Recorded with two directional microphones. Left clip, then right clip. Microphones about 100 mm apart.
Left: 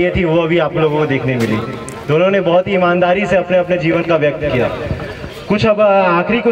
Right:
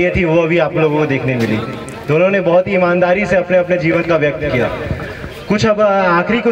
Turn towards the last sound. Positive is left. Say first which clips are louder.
# even
turn(degrees=-25)  # may be behind; listen again after turning